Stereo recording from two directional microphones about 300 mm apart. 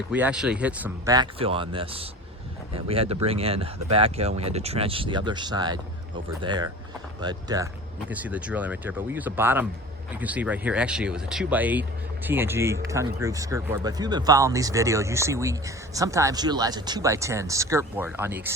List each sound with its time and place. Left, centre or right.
0.1 s speech: centre